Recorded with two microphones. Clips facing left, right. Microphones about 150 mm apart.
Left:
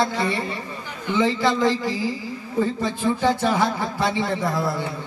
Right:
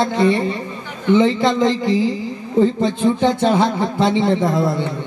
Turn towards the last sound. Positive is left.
turn(degrees=-25)  # may be behind; listen again after turning